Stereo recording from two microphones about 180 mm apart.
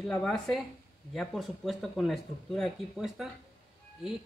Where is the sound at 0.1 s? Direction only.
5° left (ahead or behind).